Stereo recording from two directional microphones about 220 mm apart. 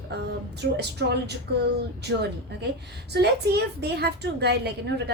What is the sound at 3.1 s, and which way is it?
A woman's voice, 50° right (ahead or behind).